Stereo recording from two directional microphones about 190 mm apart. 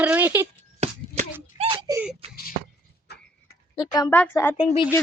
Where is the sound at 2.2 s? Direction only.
30° right (ahead or behind).